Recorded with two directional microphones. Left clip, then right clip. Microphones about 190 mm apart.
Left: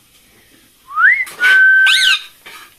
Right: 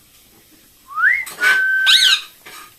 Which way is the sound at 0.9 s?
15° left (ahead or behind).